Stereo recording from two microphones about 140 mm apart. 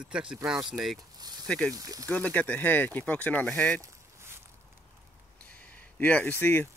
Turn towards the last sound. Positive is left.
turn(degrees=15)  # may be behind; listen again after turning